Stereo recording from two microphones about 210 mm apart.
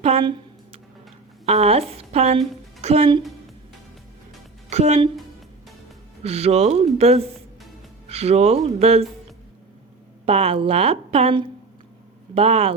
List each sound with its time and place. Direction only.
0.0 s a sound: 25° right (ahead or behind)
1.5 s a woman's voice: 30° right (ahead or behind)
4.7 s speech: 30° right (ahead or behind)
6.2 s a woman's voice: 30° right (ahead or behind)
10.2 s a woman's voice: 30° right (ahead or behind)